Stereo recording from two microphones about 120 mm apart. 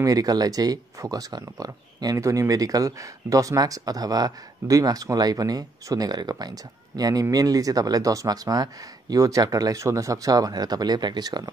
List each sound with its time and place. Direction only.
0.0 s speech: 30° right (ahead or behind)